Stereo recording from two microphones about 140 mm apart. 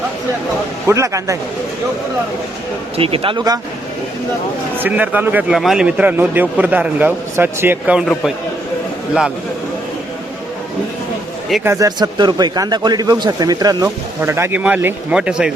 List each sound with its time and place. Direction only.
0.9 s speech: 20° right (ahead or behind)
3.0 s speech: 40° right (ahead or behind)
4.8 s speech: 10° right (ahead or behind)
7.9 s a man's voice: centre (ahead or behind)
11.6 s speech: 20° right (ahead or behind); by 15.5 s 5° right (ahead or behind)